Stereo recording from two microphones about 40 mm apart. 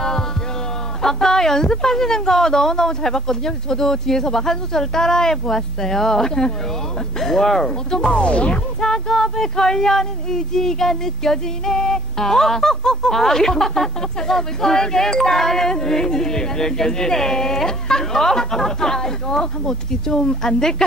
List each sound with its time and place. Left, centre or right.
1.0 s speech: centre
8.2 s speech: left
8.8 s speech: centre